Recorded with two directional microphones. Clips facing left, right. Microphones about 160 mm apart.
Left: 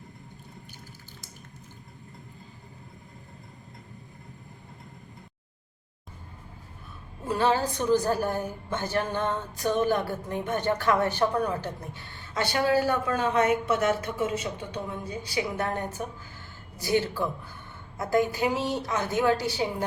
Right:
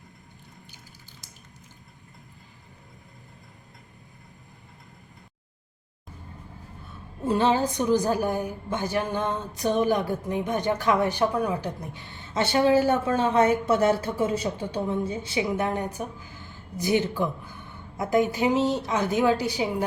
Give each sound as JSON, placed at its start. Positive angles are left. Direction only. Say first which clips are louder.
{"t": 7.3, "sound": "a woman's voice", "louder": "right 3 dB", "side_deg": -20}